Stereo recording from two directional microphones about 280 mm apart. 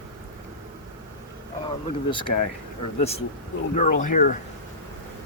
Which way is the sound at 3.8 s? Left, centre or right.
Left.